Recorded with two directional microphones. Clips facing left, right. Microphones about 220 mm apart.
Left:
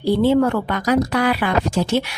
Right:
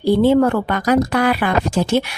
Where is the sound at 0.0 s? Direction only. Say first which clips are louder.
Right 2 dB; 50° right (ahead or behind).